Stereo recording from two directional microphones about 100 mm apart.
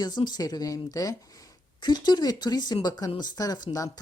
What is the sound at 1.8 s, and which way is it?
A woman's voice, 45° left (ahead or behind).